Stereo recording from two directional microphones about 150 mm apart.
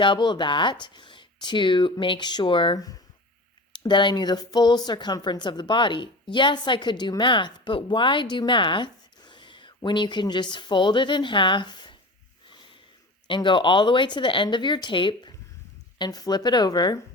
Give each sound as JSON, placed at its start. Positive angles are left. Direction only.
{"t": 0.0, "sound": "speech", "side_deg": 30}
{"t": 13.2, "sound": "speech", "side_deg": 35}